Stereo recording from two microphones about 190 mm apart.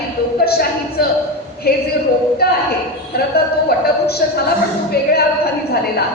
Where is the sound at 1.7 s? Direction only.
55° left (ahead or behind).